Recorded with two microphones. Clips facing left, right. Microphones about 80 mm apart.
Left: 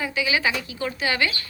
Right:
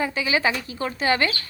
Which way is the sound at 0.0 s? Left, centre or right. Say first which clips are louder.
Right 1 dB; right.